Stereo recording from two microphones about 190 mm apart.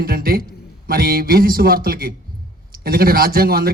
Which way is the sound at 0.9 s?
50° right (ahead or behind).